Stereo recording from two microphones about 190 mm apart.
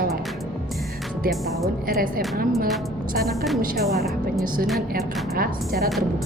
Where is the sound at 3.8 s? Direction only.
Centre (ahead or behind).